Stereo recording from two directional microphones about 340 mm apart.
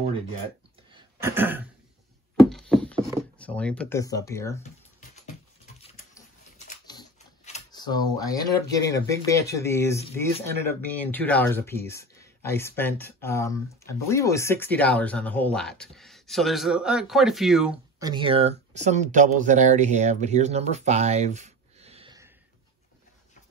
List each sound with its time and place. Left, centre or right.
0.9 s a sound: centre
2.5 s horse: centre
3.3 s speech: centre
6.9 s speech: centre